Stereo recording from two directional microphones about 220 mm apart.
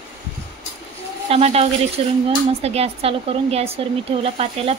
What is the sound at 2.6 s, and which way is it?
Speech, 30° right (ahead or behind).